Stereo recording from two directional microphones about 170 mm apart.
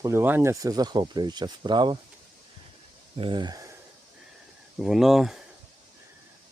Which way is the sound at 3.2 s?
25° right (ahead or behind).